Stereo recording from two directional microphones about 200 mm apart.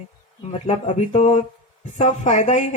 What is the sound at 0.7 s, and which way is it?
A man's voice, 35° left (ahead or behind).